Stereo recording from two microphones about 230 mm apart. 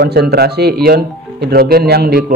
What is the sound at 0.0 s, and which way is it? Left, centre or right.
A man's voice, right.